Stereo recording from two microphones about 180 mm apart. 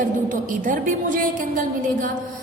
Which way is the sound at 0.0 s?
45° right (ahead or behind).